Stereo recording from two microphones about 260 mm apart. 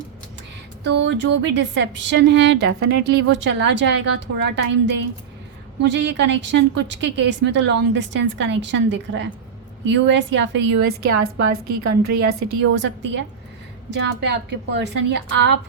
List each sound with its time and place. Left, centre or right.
0.9 s a woman's voice: right
12.3 s a woman's voice: right